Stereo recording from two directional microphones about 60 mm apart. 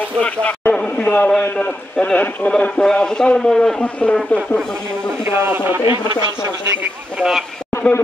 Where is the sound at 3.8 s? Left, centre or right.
Left.